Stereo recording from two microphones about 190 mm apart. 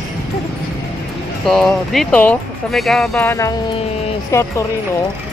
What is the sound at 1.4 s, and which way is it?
Speech, centre (ahead or behind).